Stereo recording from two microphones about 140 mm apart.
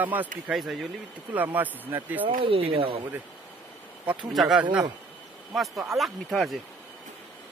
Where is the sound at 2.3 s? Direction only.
40° right (ahead or behind).